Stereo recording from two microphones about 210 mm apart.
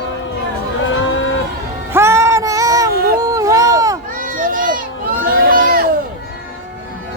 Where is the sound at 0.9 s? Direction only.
65° left (ahead or behind).